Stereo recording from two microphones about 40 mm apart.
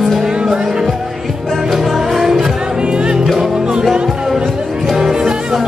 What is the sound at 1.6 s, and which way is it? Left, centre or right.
Music, centre.